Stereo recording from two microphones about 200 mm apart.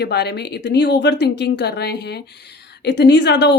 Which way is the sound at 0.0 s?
55° left (ahead or behind).